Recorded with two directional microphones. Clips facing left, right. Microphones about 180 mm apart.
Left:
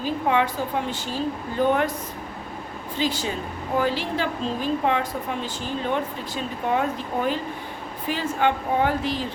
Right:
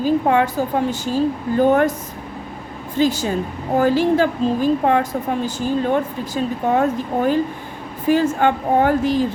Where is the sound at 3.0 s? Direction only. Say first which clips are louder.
Right 8 dB; 45° right (ahead or behind).